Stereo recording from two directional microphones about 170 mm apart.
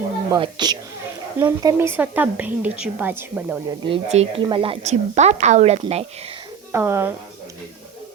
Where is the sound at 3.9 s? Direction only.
35° right (ahead or behind).